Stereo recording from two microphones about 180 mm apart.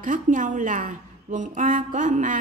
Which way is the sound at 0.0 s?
45° right (ahead or behind).